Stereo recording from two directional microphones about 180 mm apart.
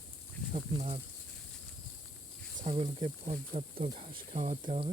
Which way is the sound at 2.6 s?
35° right (ahead or behind).